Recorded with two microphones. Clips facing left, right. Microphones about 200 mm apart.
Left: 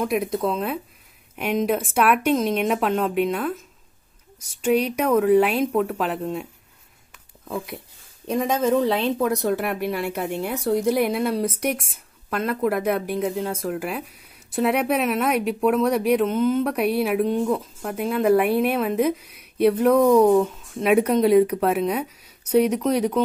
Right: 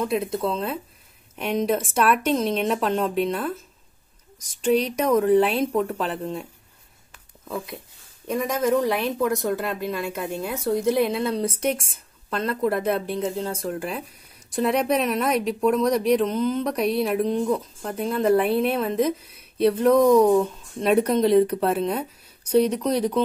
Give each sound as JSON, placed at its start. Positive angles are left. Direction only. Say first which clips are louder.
{"t": 0.2, "sound": "a woman's voice", "louder": "left 2 dB", "side_deg": 15}
{"t": 7.4, "sound": "a woman's voice", "louder": "left 1 dB", "side_deg": 15}
{"t": 8.3, "sound": "a woman's voice", "louder": "left 1 dB", "side_deg": 25}